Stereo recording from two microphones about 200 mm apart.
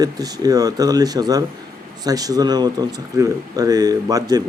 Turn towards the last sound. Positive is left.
turn(degrees=-20)  # may be behind; listen again after turning